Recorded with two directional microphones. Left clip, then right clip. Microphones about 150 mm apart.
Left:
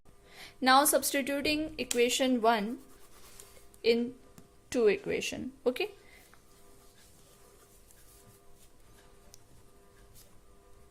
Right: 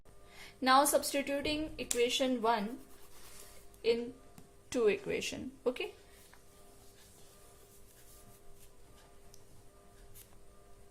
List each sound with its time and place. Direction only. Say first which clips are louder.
0.3 s speech: left 3 dB; 45° left (ahead or behind)
3.8 s speech: left 4 dB; 55° left (ahead or behind)
4.7 s speech: left 4 dB; 40° left (ahead or behind)
5.6 s speech: left 4 dB; 55° left (ahead or behind)